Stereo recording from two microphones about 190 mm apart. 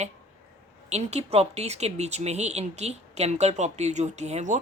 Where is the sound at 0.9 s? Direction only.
35° right (ahead or behind).